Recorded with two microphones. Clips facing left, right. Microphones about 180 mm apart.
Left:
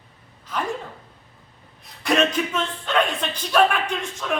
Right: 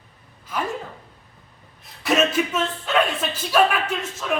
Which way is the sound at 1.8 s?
5° right (ahead or behind).